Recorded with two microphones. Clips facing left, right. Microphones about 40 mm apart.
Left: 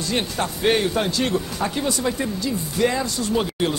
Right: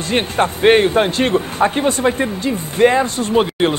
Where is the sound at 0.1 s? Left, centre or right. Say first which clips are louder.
Right 9 dB; right.